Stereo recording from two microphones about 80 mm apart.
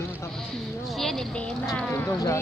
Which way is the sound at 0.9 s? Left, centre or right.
Centre.